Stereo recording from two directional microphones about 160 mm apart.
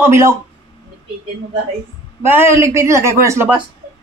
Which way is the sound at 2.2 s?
15° right (ahead or behind).